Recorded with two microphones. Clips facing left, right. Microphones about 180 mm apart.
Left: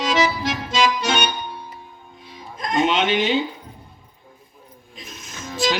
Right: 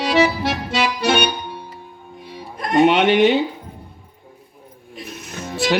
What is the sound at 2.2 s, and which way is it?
Music, 60° right (ahead or behind).